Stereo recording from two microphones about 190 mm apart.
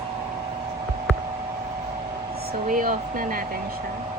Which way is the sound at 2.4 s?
45° right (ahead or behind).